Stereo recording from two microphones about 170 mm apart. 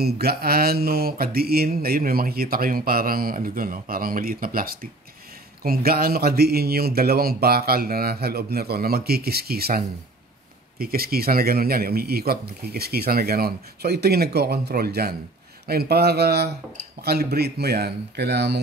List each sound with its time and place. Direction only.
0.0 s speech: 65° right (ahead or behind); by 18.6 s 80° right